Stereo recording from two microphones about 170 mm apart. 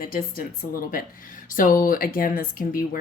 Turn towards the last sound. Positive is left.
turn(degrees=55)  # may be behind; listen again after turning